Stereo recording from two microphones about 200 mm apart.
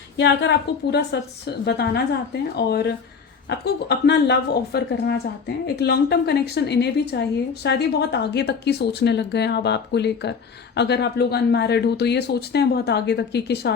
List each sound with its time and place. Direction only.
0.2 s a woman's voice: 60° left (ahead or behind)